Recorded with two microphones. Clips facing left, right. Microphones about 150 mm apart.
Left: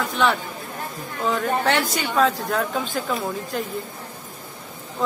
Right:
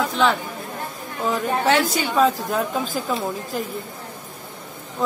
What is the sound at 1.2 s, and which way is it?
A woman's voice, 5° right (ahead or behind).